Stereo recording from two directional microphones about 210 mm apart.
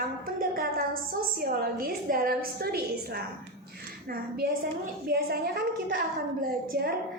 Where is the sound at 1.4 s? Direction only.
45° right (ahead or behind).